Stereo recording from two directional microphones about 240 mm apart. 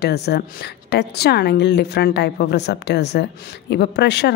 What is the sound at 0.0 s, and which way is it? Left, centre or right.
A woman's voice, left.